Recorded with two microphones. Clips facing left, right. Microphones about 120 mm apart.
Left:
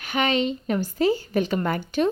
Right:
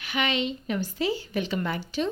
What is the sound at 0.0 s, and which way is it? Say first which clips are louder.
A woman's voice: left 5 dB; 40° left (ahead or behind).